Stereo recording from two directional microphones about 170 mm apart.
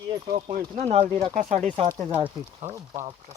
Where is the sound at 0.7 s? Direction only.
40° right (ahead or behind).